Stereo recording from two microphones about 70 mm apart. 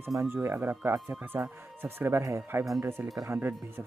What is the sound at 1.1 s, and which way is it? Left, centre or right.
Music, right.